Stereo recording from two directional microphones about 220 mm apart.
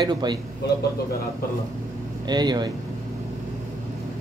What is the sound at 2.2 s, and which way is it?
Speech, 20° right (ahead or behind).